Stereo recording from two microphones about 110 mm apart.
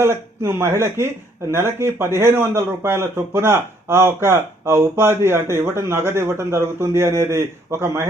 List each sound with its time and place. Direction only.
0.0 s speech: 20° right (ahead or behind)